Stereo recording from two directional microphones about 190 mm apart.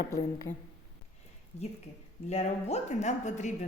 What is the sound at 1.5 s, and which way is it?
A woman's voice, 35° left (ahead or behind).